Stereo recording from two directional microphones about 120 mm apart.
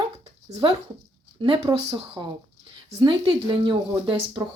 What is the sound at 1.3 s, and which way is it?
Speech, 45° right (ahead or behind).